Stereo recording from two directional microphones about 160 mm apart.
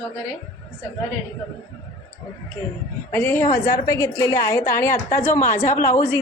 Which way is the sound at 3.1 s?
15° left (ahead or behind).